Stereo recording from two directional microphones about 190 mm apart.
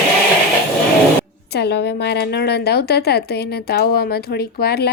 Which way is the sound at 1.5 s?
60° left (ahead or behind).